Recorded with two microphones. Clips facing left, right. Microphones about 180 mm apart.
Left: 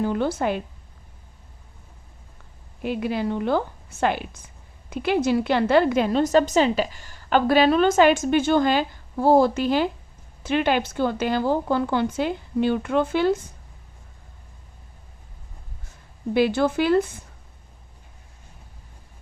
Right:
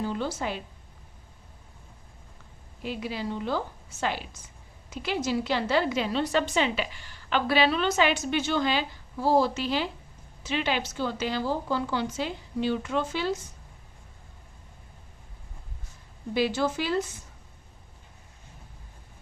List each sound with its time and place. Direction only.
0.0 s speech: 55° left (ahead or behind)
2.8 s a woman's voice: 55° left (ahead or behind)
16.3 s speech: 55° left (ahead or behind)